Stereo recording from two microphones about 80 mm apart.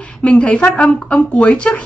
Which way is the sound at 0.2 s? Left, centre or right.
Centre.